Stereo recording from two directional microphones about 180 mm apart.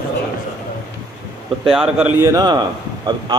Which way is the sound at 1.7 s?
5° right (ahead or behind).